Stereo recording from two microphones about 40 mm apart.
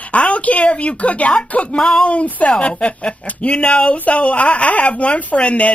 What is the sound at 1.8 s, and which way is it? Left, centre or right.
Speech, centre.